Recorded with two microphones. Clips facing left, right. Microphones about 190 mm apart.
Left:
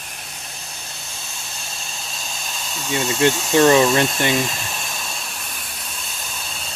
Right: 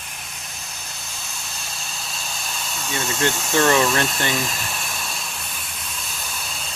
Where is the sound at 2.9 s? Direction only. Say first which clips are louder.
Left 5 dB; 15° left (ahead or behind).